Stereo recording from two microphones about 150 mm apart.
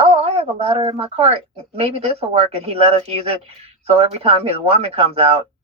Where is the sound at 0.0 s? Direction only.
40° right (ahead or behind).